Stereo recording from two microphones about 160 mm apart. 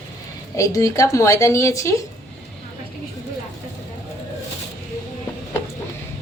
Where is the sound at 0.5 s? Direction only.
20° left (ahead or behind).